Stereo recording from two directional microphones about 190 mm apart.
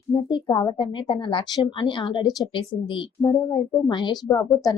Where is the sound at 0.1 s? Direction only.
25° left (ahead or behind).